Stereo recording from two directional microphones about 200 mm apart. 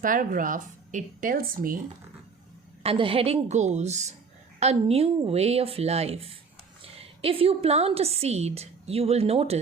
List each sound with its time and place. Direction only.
0.0 s speech: 45° right (ahead or behind)
2.8 s a woman's voice: 30° right (ahead or behind)